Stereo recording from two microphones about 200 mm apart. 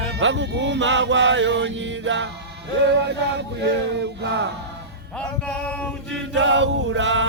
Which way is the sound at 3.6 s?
60° right (ahead or behind).